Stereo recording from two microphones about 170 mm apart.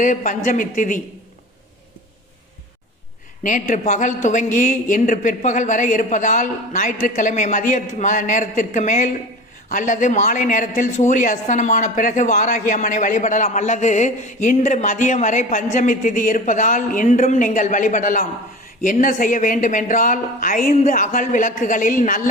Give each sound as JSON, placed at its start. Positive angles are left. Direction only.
{"t": 0.0, "sound": "a woman's voice", "side_deg": 50}
{"t": 3.4, "sound": "a woman's voice", "side_deg": 50}